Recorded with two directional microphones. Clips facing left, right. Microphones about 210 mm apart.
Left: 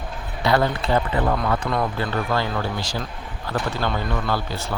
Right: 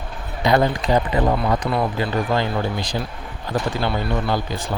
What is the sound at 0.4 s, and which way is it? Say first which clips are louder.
Speech: right 2 dB; 15° right (ahead or behind).